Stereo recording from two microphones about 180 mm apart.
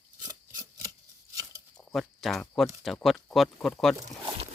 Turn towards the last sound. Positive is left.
turn(degrees=0)  # may be behind; listen again after turning